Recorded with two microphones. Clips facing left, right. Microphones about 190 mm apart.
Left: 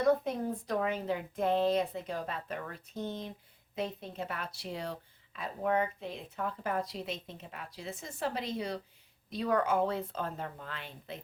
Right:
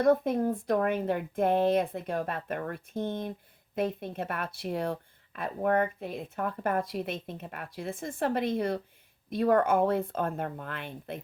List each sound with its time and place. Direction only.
0.0 s a woman's voice: 50° right (ahead or behind)